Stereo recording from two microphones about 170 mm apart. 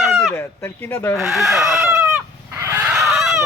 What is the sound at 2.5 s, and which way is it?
Fowl, 15° right (ahead or behind).